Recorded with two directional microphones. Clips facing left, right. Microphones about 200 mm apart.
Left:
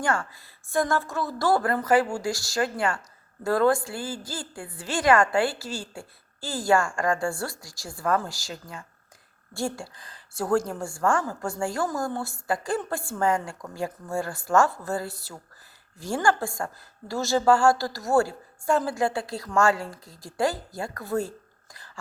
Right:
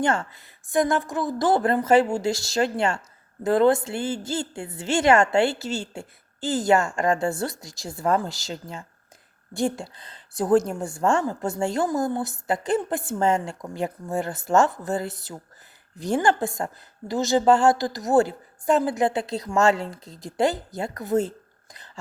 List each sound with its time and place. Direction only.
0.0 s a woman's voice: 25° right (ahead or behind)